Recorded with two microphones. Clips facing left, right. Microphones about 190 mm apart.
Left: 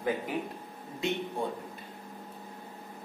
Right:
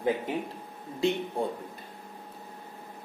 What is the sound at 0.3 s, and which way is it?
Speech, 25° right (ahead or behind).